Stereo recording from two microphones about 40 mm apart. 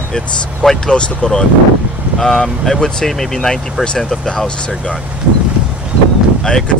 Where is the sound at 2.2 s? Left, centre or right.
Centre.